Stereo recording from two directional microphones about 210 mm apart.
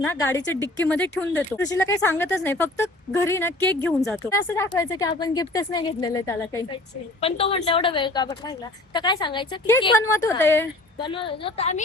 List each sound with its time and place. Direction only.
0.0 s speech: 10° left (ahead or behind)
7.2 s a woman's voice: 25° left (ahead or behind)
11.0 s a woman's voice: 25° left (ahead or behind)